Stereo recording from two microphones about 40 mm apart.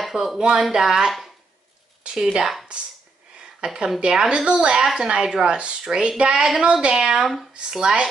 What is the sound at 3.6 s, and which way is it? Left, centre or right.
Speech, centre.